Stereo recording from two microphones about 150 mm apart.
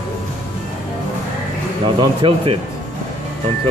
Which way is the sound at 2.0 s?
35° right (ahead or behind).